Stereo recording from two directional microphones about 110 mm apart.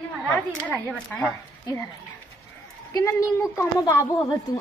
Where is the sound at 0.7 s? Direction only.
15° left (ahead or behind).